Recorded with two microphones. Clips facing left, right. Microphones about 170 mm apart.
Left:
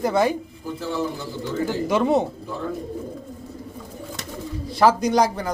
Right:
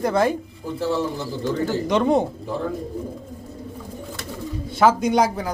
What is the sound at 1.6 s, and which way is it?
Speech, 5° left (ahead or behind).